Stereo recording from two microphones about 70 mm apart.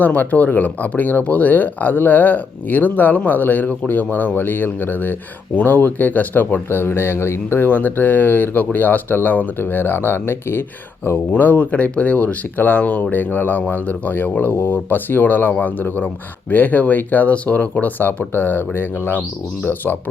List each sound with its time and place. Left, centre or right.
0.0 s speech: left